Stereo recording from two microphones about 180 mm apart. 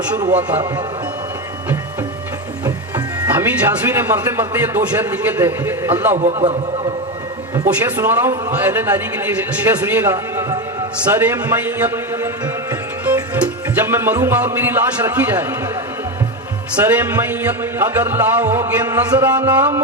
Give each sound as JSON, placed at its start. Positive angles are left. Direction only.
{"t": 0.3, "sound": "a man's voice", "side_deg": -10}
{"t": 3.2, "sound": "a man's voice", "side_deg": -10}
{"t": 6.1, "sound": "a man's voice", "side_deg": -40}
{"t": 7.7, "sound": "a man's voice", "side_deg": -10}
{"t": 13.3, "sound": "a man's voice", "side_deg": -10}
{"t": 16.7, "sound": "a man's voice", "side_deg": -10}